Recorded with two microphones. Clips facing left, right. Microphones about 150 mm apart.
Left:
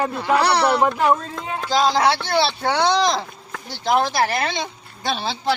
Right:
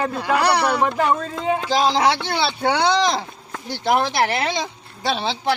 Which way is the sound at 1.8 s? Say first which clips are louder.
Left 1 dB; 15° right (ahead or behind).